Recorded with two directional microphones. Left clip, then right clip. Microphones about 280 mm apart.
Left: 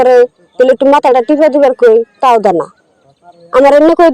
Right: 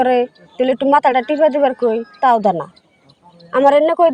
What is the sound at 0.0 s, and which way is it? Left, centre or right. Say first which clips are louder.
Speech: left 9 dB; centre.